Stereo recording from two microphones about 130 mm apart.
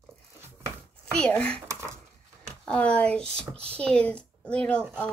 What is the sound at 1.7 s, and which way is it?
Speech, 20° right (ahead or behind).